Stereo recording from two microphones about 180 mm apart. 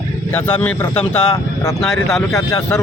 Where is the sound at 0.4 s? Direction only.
5° left (ahead or behind).